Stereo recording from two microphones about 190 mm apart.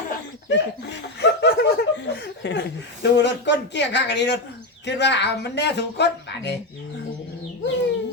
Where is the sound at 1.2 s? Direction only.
65° left (ahead or behind).